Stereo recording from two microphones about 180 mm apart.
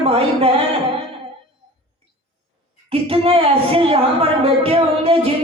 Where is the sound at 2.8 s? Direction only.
30° right (ahead or behind).